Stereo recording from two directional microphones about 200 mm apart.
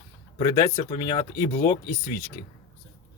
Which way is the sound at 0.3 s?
20° left (ahead or behind).